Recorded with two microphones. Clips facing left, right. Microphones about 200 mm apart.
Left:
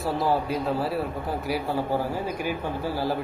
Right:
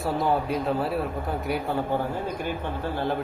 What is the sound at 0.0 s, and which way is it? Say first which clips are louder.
A man's voice: even; centre (ahead or behind).